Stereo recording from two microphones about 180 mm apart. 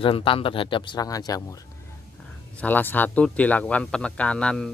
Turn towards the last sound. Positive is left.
turn(degrees=5)  # may be behind; listen again after turning